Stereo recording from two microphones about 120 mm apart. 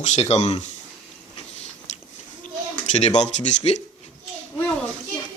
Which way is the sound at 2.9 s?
70° left (ahead or behind).